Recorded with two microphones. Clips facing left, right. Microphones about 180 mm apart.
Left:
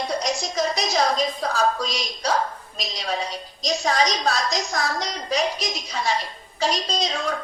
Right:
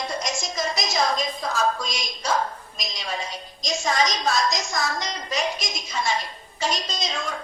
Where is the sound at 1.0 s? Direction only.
35° left (ahead or behind).